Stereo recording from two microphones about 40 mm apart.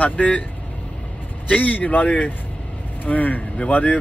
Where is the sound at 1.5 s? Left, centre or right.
Left.